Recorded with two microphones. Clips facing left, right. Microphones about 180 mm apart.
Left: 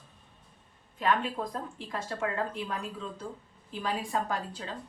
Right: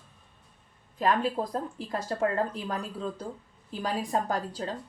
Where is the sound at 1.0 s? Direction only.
35° right (ahead or behind).